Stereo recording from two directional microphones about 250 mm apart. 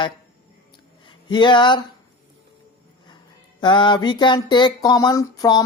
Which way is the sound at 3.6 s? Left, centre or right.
Centre.